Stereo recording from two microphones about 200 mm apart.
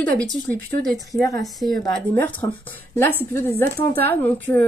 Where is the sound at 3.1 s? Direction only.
10° left (ahead or behind).